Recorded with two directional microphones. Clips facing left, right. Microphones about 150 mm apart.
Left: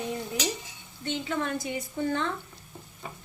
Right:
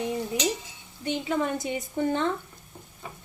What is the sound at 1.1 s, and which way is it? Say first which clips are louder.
A woman's voice: right 3 dB; 15° right (ahead or behind).